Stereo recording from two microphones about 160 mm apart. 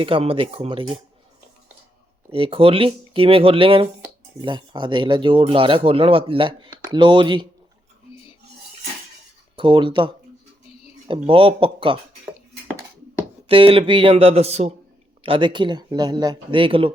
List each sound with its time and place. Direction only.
0.0 s speech: 35° right (ahead or behind)
2.3 s speech: 35° right (ahead or behind)
9.6 s speech: 30° right (ahead or behind)
11.1 s speech: 35° right (ahead or behind)
13.5 s speech: 35° right (ahead or behind)
15.2 s speech: 30° right (ahead or behind)